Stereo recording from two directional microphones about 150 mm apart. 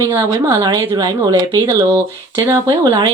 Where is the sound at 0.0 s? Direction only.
25° right (ahead or behind).